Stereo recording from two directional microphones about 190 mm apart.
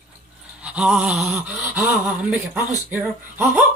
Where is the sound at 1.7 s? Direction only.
10° right (ahead or behind).